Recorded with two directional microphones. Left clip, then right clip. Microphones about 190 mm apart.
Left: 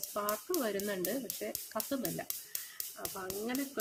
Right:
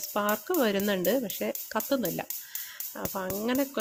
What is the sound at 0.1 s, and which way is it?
Speech, 45° right (ahead or behind).